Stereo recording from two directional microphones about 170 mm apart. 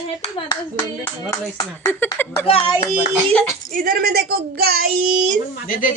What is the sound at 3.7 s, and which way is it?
Speech, 55° right (ahead or behind).